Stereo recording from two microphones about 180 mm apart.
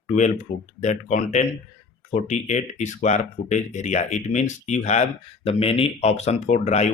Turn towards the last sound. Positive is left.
turn(degrees=40)  # may be behind; listen again after turning